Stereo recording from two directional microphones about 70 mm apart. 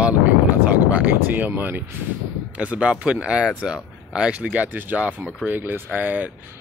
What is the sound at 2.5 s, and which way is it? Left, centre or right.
Speech, right.